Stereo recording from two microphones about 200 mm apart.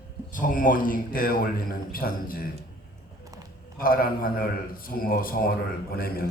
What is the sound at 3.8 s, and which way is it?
A man's voice, 45° left (ahead or behind).